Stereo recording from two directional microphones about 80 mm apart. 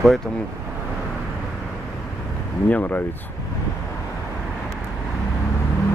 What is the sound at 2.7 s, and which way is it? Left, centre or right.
Speech, left.